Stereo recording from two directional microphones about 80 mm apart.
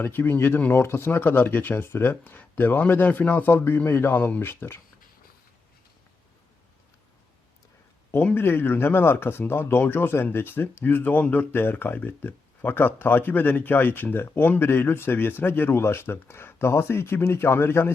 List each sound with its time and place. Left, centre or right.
0.0 s speech: left
8.4 s speech: left